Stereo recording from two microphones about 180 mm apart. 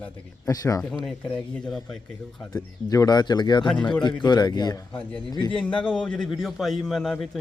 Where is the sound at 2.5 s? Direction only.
20° left (ahead or behind).